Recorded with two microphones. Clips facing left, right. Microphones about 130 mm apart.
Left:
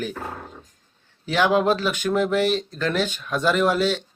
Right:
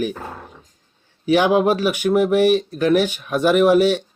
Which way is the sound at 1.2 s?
15° right (ahead or behind).